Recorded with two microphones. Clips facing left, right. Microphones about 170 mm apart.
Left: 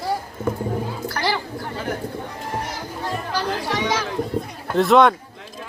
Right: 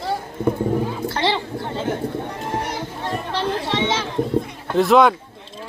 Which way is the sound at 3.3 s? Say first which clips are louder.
Right 2 dB; 25° right (ahead or behind).